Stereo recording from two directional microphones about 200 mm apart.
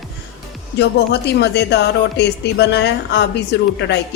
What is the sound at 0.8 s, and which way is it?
Speech, 60° left (ahead or behind).